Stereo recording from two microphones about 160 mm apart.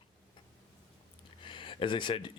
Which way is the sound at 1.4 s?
30° left (ahead or behind).